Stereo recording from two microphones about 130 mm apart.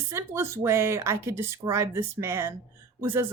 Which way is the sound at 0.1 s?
20° right (ahead or behind).